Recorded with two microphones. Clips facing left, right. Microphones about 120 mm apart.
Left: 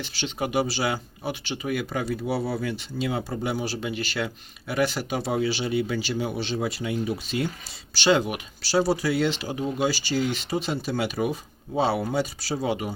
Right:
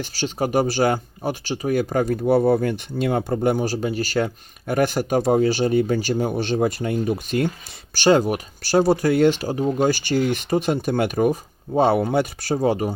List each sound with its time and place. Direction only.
0.0 s speech: 40° right (ahead or behind)